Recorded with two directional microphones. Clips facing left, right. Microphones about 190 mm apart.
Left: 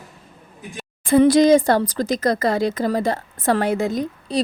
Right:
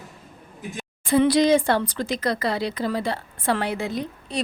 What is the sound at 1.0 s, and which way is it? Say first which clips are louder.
A woman's voice: left 5 dB; 50° left (ahead or behind).